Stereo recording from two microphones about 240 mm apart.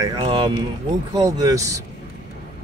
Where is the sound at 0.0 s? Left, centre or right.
Centre.